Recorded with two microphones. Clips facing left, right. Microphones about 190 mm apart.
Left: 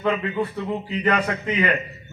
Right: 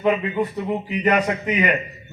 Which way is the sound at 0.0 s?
15° right (ahead or behind).